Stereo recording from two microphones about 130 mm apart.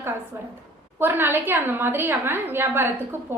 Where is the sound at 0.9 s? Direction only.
15° right (ahead or behind).